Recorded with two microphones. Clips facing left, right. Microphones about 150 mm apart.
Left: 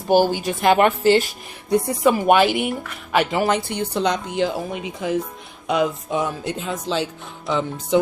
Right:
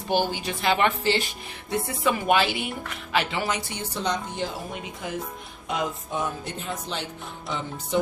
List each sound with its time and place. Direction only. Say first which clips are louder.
0.1 s speech: left 8 dB; 45° left (ahead or behind); by 7.1 s 90° left